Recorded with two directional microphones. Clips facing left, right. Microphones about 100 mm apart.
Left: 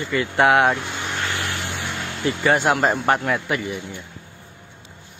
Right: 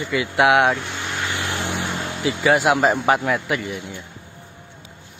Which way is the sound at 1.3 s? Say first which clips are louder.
Right 2 dB; 15° right (ahead or behind).